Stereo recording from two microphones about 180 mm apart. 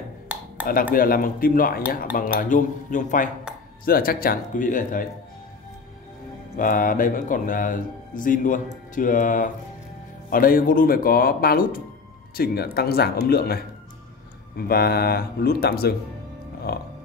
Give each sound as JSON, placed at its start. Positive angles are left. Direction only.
{"t": 0.9, "sound": "speech", "side_deg": 50}
{"t": 6.5, "sound": "speech", "side_deg": 50}
{"t": 14.6, "sound": "speech", "side_deg": 60}